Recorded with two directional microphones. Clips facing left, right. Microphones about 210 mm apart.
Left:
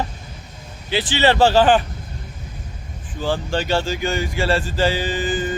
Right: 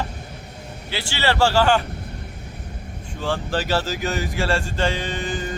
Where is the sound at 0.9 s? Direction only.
20° left (ahead or behind).